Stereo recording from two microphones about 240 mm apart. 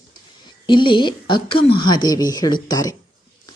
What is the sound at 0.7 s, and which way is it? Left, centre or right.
A woman's voice, centre.